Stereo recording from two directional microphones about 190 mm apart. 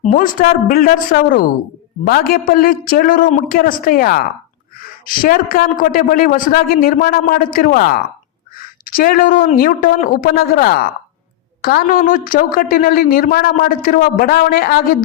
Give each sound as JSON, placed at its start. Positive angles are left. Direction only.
{"t": 0.0, "sound": "a woman's voice", "side_deg": 45}